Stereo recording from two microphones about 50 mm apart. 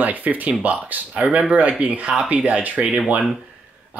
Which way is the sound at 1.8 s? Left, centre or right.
Right.